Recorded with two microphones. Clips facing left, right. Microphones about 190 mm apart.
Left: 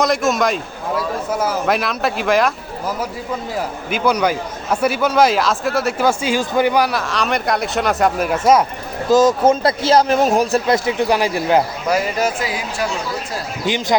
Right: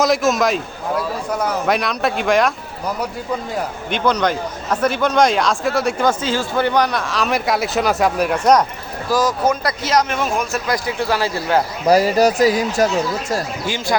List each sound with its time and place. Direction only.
0.0 s a man's voice: centre (ahead or behind)
9.0 s a man's voice: 25° left (ahead or behind)
11.9 s speech: 35° right (ahead or behind)
13.7 s speech: 20° left (ahead or behind)